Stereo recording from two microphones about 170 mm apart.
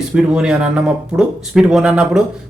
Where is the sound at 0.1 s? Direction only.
5° right (ahead or behind).